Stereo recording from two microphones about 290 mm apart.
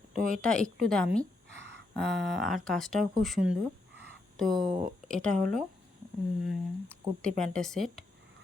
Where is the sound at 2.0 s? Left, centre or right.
Right.